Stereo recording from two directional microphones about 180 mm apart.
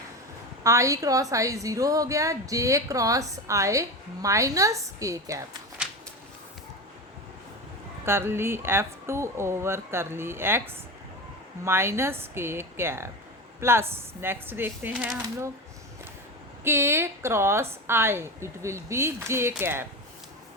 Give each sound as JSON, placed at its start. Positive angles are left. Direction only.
{"t": 0.6, "sound": "a woman's voice", "side_deg": -15}
{"t": 8.0, "sound": "a woman's voice", "side_deg": -15}
{"t": 16.6, "sound": "a woman's voice", "side_deg": -15}